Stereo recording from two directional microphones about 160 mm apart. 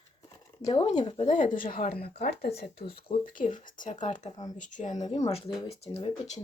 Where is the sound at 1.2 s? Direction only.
50° left (ahead or behind); by 2.8 s 80° left.